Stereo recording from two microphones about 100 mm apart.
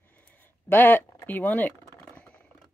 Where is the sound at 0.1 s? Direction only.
20° left (ahead or behind).